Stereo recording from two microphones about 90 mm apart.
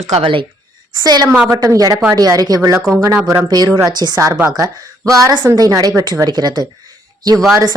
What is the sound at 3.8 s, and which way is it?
A woman's voice, 50° right (ahead or behind).